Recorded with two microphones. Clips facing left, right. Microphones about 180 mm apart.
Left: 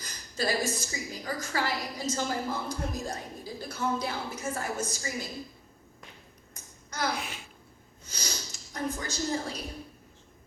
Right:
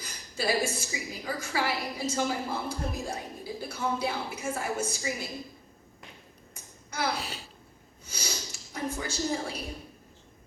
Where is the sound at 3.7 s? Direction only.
10° right (ahead or behind).